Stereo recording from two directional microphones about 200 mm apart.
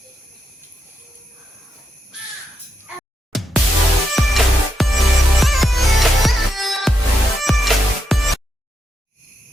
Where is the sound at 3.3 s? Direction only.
Centre (ahead or behind).